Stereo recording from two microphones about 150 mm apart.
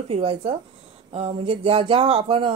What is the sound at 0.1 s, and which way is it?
Speech, 40° right (ahead or behind).